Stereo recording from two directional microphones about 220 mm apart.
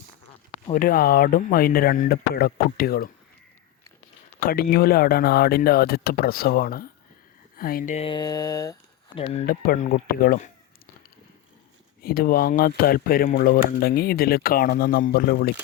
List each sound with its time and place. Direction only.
0.5 s speech: 35° left (ahead or behind)
4.4 s speech: 40° left (ahead or behind); by 8.7 s 15° left (ahead or behind)
9.1 s speech: 30° left (ahead or behind)
12.0 s speech: 40° left (ahead or behind)